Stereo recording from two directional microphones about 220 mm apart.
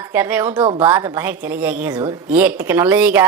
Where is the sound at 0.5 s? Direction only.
20° right (ahead or behind).